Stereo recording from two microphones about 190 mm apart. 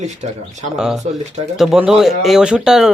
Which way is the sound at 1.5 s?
Centre (ahead or behind).